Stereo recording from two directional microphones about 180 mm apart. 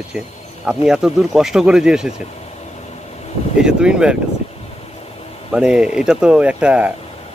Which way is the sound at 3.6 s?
5° right (ahead or behind).